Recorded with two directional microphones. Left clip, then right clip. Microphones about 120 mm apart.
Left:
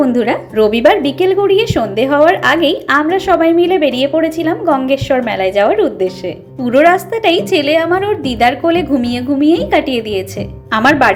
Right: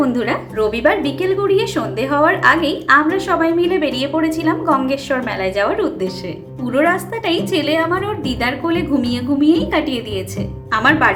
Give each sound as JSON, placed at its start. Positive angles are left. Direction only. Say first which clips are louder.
{"t": 0.0, "sound": "a woman's voice", "louder": "left 5 dB", "side_deg": 30}
{"t": 6.7, "sound": "a woman's voice", "louder": "left 7 dB", "side_deg": 50}